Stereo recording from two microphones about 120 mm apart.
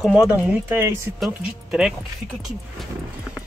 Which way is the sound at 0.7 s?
20° right (ahead or behind).